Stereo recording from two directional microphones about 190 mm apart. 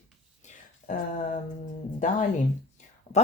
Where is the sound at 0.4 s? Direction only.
40° left (ahead or behind).